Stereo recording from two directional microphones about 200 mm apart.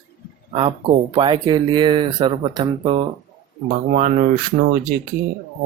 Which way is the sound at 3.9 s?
40° right (ahead or behind).